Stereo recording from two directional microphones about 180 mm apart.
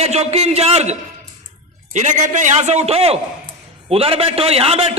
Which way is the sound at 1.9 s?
40° right (ahead or behind).